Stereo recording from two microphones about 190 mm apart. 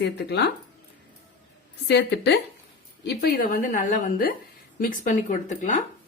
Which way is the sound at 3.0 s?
55° left (ahead or behind).